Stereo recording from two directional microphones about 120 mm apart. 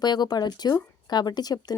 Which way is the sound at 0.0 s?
35° left (ahead or behind).